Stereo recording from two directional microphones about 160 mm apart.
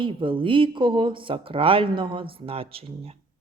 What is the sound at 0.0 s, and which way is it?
Speech, 30° right (ahead or behind).